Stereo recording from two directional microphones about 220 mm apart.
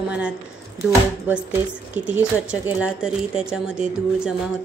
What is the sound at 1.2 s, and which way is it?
Speech, 10° right (ahead or behind).